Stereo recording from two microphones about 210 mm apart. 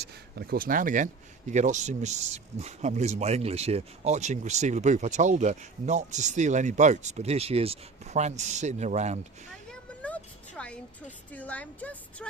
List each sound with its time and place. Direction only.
0.3 s speech: 45° right (ahead or behind)
9.6 s a sound: 5° left (ahead or behind)
11.3 s a woman's voice: 5° left (ahead or behind)